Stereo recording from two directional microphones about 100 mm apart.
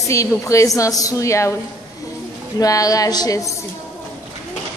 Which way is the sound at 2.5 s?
35° left (ahead or behind).